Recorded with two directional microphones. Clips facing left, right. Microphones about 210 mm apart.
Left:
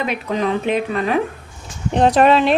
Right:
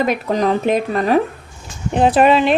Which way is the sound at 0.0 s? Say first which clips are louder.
Right 4 dB; 40° right (ahead or behind).